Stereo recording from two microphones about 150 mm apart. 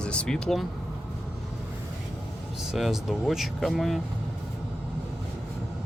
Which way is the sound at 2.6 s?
Centre (ahead or behind).